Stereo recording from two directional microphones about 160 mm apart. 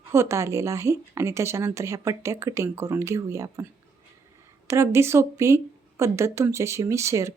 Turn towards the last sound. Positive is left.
turn(degrees=-20)  # may be behind; listen again after turning